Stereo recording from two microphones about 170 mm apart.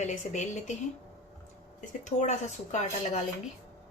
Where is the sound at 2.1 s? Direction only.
45° left (ahead or behind).